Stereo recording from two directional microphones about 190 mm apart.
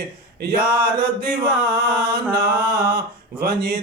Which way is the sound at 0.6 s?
55° right (ahead or behind).